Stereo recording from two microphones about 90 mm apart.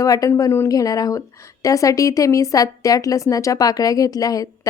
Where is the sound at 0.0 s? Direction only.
40° left (ahead or behind).